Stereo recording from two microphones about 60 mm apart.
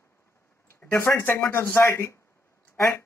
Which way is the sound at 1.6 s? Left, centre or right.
Left.